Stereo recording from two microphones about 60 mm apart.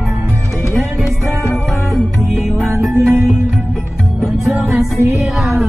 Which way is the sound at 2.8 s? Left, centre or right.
Centre.